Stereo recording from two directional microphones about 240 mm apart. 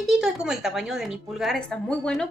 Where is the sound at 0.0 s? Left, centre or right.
Centre.